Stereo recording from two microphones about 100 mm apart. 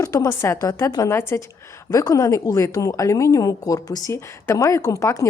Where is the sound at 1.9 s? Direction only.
35° left (ahead or behind).